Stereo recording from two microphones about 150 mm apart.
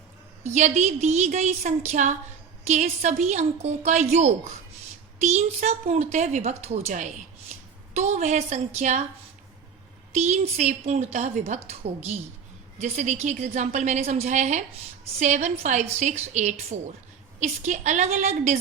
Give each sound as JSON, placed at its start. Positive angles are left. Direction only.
{"t": 0.4, "sound": "a woman's voice", "side_deg": -50}
{"t": 10.2, "sound": "a woman's voice", "side_deg": -50}